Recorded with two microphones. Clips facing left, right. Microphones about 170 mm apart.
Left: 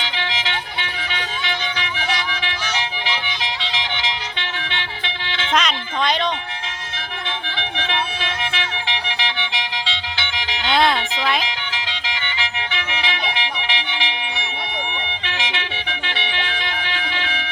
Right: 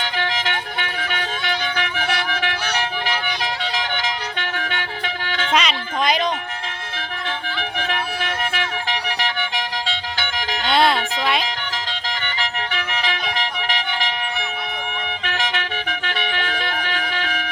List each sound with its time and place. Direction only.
0.0 s music: 50° right (ahead or behind)
5.5 s music: 5° right (ahead or behind)
7.3 s siren: 45° right (ahead or behind)
10.7 s music: centre (ahead or behind)
11.4 s music: 45° right (ahead or behind)
15.2 s music: 40° right (ahead or behind)